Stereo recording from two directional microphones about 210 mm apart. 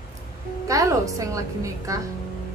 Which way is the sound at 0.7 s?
15° right (ahead or behind).